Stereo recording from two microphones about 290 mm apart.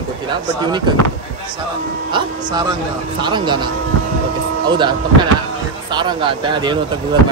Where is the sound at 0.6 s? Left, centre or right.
Centre.